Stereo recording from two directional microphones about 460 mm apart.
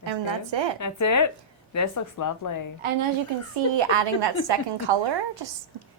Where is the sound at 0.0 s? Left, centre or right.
Right.